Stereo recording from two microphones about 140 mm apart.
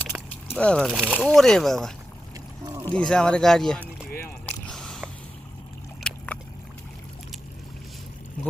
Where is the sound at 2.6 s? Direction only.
20° right (ahead or behind).